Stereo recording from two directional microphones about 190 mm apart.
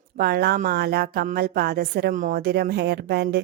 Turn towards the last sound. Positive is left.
turn(degrees=-60)  # may be behind; listen again after turning